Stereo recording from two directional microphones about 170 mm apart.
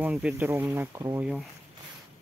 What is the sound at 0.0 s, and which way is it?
Speech, 5° right (ahead or behind).